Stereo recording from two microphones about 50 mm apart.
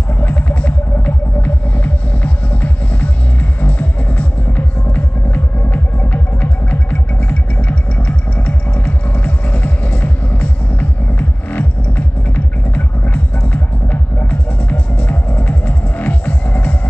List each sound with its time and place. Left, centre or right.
0.2 s music: left